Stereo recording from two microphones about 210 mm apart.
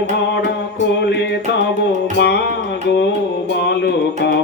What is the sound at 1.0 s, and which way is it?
Music, 55° left (ahead or behind).